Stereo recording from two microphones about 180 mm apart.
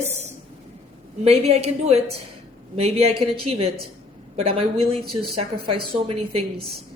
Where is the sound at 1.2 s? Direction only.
35° right (ahead or behind).